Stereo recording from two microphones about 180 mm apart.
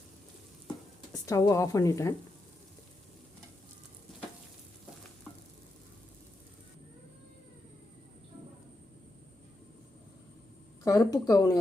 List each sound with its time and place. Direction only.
1.1 s a woman's voice: 15° left (ahead or behind)
10.8 s speech: 20° left (ahead or behind)